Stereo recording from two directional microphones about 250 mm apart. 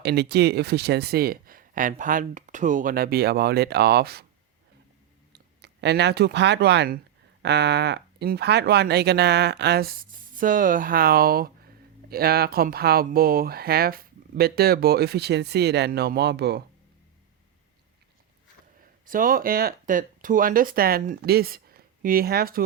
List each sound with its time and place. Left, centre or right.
0.0 s speech: right
5.3 s speech: right
19.0 s speech: right